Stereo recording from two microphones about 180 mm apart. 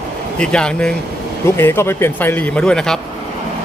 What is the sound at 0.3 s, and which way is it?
Speech, 5° left (ahead or behind).